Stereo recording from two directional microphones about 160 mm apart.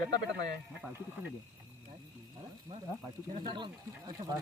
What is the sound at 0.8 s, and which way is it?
Speech, 10° right (ahead or behind).